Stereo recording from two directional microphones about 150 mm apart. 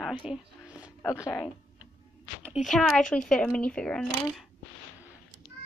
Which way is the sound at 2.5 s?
Centre (ahead or behind).